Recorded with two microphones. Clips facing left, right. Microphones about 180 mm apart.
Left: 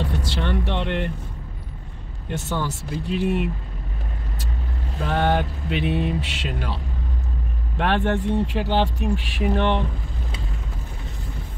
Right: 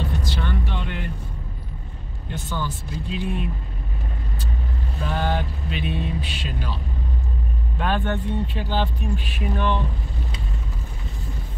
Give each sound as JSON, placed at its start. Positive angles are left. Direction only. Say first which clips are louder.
{"t": 0.0, "sound": "vehicle", "louder": "left 2 dB", "side_deg": 75}
{"t": 2.3, "sound": "speech", "louder": "left 3 dB", "side_deg": 80}
{"t": 5.0, "sound": "speech", "louder": "left 4 dB", "side_deg": 65}